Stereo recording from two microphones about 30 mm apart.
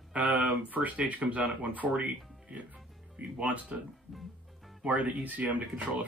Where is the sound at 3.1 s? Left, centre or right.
Right.